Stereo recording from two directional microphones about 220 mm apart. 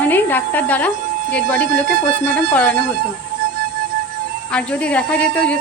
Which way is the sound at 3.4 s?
45° right (ahead or behind).